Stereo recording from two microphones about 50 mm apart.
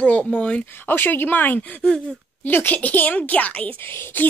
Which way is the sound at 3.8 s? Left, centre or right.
Left.